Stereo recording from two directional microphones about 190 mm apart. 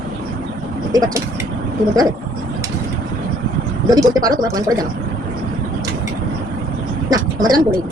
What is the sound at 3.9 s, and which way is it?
Speech, 20° right (ahead or behind).